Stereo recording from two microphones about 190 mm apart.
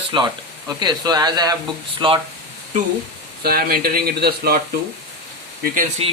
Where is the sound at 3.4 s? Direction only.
50° right (ahead or behind).